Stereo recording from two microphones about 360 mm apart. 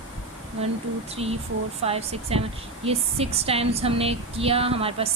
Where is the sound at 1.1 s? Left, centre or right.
Centre.